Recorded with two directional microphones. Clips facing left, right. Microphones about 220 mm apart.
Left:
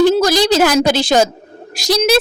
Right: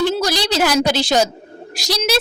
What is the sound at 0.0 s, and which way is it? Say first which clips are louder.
A woman's voice: left 7 dB; 45° left (ahead or behind).